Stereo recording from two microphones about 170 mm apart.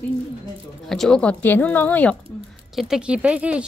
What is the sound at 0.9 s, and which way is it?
Speech, 5° left (ahead or behind).